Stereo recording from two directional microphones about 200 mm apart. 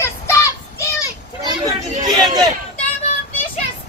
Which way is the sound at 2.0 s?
20° right (ahead or behind).